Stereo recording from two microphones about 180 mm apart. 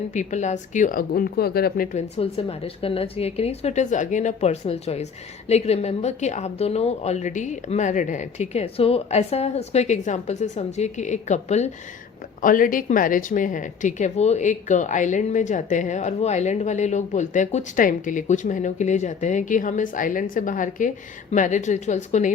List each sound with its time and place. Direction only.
0.1 s a woman's voice: 40° left (ahead or behind)
2.0 s a woman's voice: 35° left (ahead or behind)
12.4 s a woman's voice: 50° left (ahead or behind)